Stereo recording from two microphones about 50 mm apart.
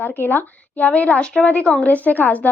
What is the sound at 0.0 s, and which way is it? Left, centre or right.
A woman's voice, left.